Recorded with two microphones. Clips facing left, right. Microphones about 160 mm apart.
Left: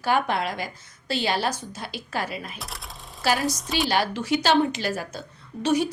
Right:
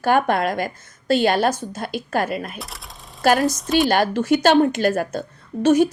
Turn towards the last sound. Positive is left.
turn(degrees=-50)  # may be behind; listen again after turning